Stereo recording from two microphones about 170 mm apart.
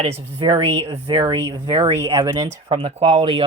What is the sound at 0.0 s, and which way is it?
Speech, 40° right (ahead or behind).